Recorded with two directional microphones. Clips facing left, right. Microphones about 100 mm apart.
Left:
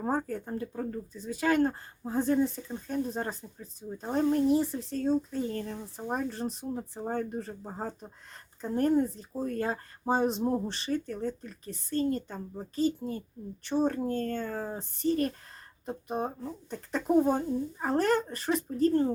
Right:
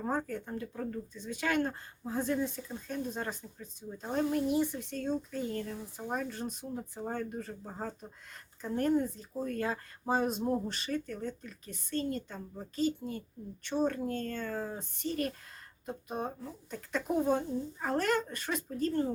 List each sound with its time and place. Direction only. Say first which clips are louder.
0.0 s speech: left 3 dB; 35° left (ahead or behind)